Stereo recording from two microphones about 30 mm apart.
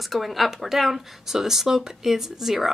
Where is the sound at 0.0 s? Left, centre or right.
Centre.